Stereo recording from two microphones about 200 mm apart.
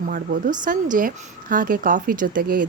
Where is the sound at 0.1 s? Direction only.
45° right (ahead or behind).